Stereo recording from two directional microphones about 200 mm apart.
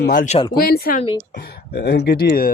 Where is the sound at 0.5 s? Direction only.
50° left (ahead or behind).